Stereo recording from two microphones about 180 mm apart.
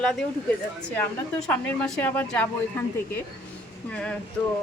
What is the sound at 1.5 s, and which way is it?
A woman's voice, 5° left (ahead or behind).